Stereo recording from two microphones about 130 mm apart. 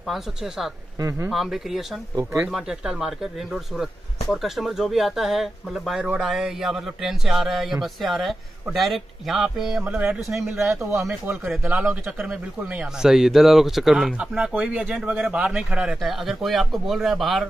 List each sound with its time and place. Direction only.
0.1 s speech: centre (ahead or behind)
0.9 s speech: 25° right (ahead or behind)
1.3 s speech: centre (ahead or behind)
2.1 s speech: 25° right (ahead or behind)
2.5 s speech: 5° right (ahead or behind)
10.8 s speech: 20° right (ahead or behind)
11.2 s speech: 5° right (ahead or behind)